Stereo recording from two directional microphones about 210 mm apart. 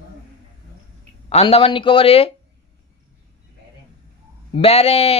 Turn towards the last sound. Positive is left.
turn(degrees=30)  # may be behind; listen again after turning